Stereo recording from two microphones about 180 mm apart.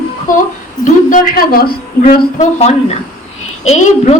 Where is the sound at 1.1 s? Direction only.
50° left (ahead or behind).